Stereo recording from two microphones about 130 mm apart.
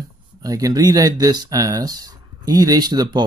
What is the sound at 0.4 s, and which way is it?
Speech, 30° right (ahead or behind).